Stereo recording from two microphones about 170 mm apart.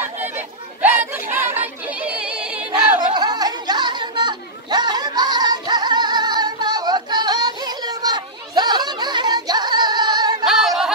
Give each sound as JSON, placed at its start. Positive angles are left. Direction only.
{"t": 0.8, "sound": "female singing", "side_deg": -10}
{"t": 3.2, "sound": "chatter", "side_deg": -25}
{"t": 10.4, "sound": "singing", "side_deg": 0}